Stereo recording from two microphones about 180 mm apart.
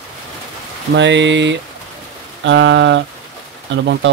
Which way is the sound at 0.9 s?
85° right.